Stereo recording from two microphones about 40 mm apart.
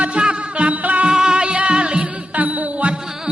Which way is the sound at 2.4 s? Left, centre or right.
Right.